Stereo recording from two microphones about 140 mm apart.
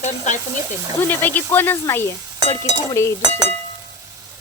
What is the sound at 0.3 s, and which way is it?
Speech, 55° left (ahead or behind).